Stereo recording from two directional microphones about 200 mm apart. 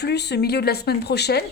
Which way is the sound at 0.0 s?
55° left (ahead or behind).